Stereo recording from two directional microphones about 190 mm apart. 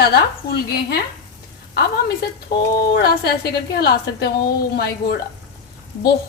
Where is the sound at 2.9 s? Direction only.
60° left (ahead or behind).